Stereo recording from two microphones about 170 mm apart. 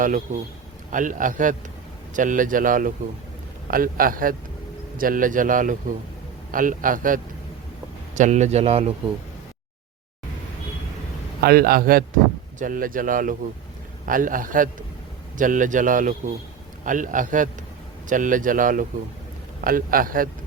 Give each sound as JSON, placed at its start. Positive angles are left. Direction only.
{"t": 0.3, "sound": "a man's voice", "side_deg": -45}
{"t": 11.3, "sound": "a man's voice", "side_deg": -65}